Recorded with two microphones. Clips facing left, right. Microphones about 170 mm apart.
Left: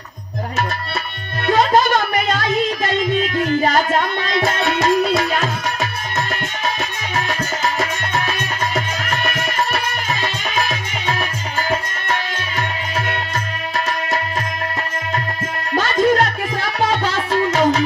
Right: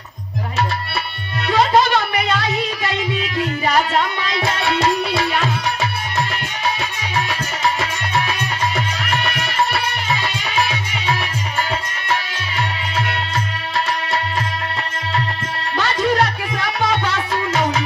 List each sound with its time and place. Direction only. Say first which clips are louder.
1.4 s music: left 1 dB; 45° left (ahead or behind)
15.7 s music: left 3 dB; 45° left (ahead or behind)